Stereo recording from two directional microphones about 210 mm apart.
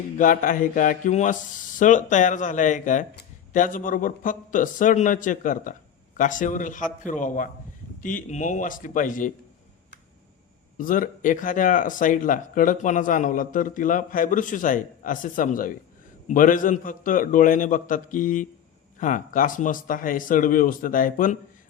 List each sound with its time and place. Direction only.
0.2 s speech: 40° left (ahead or behind)
10.8 s speech: 40° left (ahead or behind)